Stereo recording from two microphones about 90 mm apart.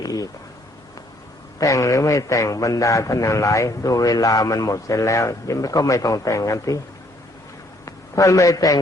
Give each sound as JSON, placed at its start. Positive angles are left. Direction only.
{"t": 0.0, "sound": "a sound", "side_deg": 45}
{"t": 1.5, "sound": "a man's voice", "side_deg": 35}
{"t": 7.9, "sound": "a man's voice", "side_deg": 35}